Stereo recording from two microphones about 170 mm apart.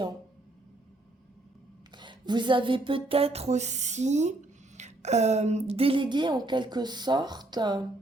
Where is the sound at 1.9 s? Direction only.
25° right (ahead or behind).